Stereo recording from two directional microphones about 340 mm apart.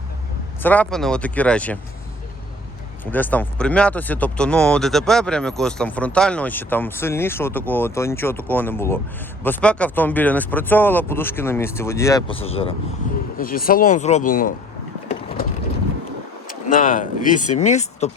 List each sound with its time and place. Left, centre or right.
0.6 s speech: centre
3.1 s speech: centre; by 14.5 s left
16.5 s speech: left